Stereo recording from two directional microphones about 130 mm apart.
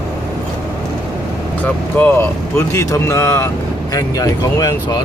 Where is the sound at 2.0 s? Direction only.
15° left (ahead or behind).